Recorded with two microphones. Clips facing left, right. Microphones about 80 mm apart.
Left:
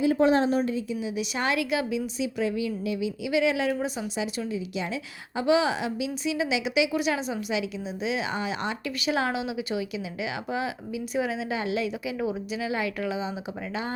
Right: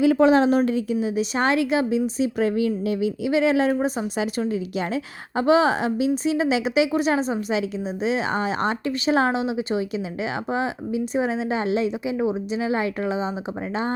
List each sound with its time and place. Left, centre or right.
0.0 s a woman's voice: right
0.9 s speech: right
4.2 s speech: right